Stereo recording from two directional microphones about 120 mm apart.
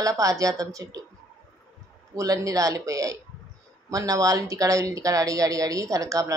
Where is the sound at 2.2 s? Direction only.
30° right (ahead or behind).